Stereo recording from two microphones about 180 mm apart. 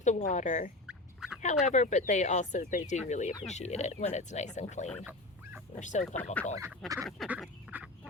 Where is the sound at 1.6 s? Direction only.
40° left (ahead or behind).